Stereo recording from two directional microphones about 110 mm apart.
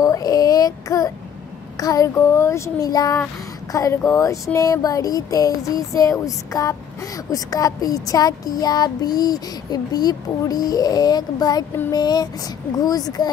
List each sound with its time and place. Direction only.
0.0 s child singing: 35° left (ahead or behind)
1.8 s speech: 35° left (ahead or behind)